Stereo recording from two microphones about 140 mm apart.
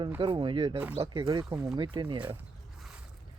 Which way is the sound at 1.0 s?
35° right (ahead or behind).